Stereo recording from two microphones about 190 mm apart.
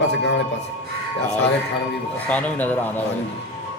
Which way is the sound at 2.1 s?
10° left (ahead or behind).